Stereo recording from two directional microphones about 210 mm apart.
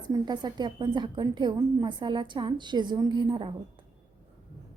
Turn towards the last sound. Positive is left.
turn(degrees=-25)  # may be behind; listen again after turning